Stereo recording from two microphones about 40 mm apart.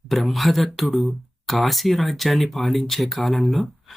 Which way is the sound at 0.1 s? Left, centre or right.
Centre.